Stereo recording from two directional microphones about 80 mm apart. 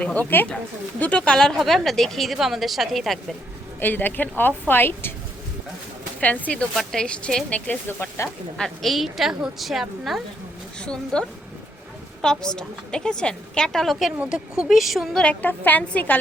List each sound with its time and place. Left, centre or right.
0.0 s a woman's voice: centre
3.8 s a woman's voice: left
6.1 s a woman's voice: centre
7.7 s a woman's voice: left
8.5 s speech: centre
10.8 s a woman's voice: centre
14.2 s speech: centre
15.2 s a woman's voice: centre